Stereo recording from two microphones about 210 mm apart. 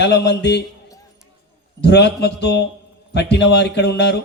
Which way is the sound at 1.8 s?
55° left (ahead or behind).